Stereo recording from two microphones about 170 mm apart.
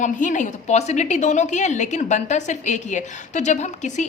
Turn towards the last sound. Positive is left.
turn(degrees=45)  # may be behind; listen again after turning